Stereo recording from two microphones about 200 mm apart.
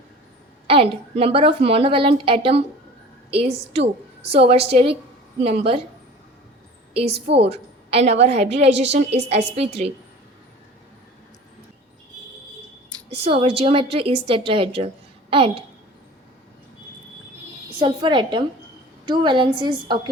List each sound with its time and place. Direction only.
0.7 s a woman's voice: 30° right (ahead or behind)
6.9 s a woman's voice: 30° right (ahead or behind)
7.5 s a sound: 30° right (ahead or behind)
8.2 s a woman's voice: 35° right (ahead or behind)
13.2 s a woman's voice: 30° right (ahead or behind)
17.7 s a woman's voice: 25° right (ahead or behind)